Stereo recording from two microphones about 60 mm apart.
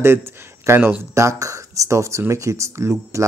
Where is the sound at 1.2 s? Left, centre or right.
Right.